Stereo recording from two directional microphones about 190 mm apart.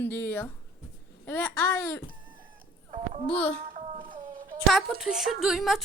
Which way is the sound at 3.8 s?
25° right (ahead or behind).